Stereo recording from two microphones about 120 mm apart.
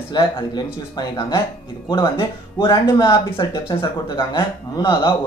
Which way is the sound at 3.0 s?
40° left (ahead or behind).